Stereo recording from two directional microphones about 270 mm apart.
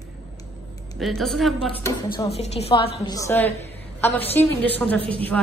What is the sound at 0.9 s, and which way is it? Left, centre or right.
Speech, centre.